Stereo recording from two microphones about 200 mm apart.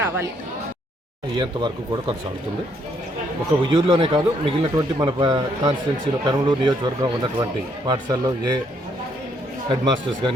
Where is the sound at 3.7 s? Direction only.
25° right (ahead or behind).